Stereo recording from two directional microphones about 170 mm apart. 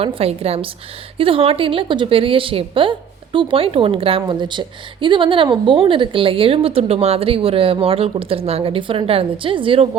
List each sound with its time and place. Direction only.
0.0 s a woman's voice: 35° right (ahead or behind)